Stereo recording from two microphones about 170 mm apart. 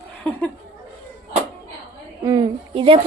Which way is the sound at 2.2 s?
30° right (ahead or behind).